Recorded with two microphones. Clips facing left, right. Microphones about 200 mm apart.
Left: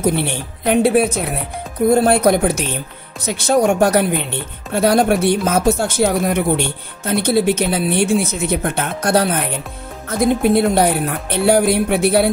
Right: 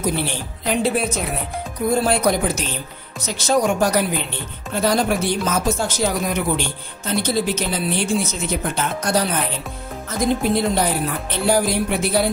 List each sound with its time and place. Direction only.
0.0 s speech: 60° left (ahead or behind)